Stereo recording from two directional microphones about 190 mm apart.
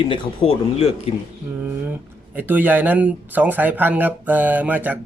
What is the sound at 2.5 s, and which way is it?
Speech, 10° right (ahead or behind).